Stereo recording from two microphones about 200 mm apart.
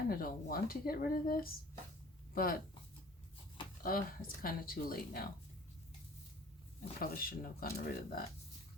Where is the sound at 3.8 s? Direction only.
45° left (ahead or behind).